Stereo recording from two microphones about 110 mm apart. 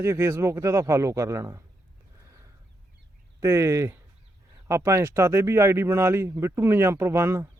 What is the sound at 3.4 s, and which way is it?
Speech, 25° right (ahead or behind).